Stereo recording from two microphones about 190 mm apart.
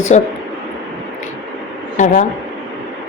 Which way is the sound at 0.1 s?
40° left (ahead or behind).